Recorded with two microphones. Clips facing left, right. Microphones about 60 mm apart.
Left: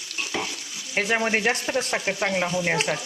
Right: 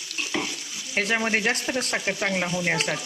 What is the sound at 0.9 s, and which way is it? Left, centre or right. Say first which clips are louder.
Speech: left 1 dB; centre.